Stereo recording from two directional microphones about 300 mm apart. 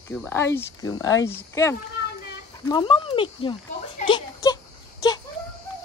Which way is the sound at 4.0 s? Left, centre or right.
Centre.